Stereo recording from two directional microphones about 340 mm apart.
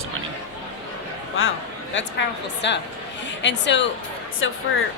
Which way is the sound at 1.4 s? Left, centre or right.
Left.